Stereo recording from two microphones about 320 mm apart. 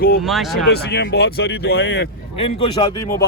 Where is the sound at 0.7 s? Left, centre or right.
Left.